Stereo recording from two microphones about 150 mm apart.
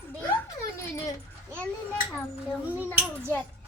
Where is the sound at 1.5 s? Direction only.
10° left (ahead or behind).